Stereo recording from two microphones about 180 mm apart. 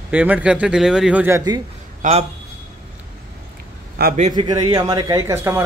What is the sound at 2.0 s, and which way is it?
Speech, 40° right (ahead or behind).